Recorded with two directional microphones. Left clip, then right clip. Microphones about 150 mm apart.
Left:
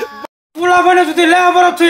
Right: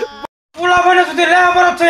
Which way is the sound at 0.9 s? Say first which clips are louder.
Left 1 dB; 50° left (ahead or behind).